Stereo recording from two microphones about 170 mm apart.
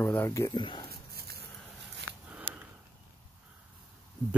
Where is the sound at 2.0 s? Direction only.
90° right.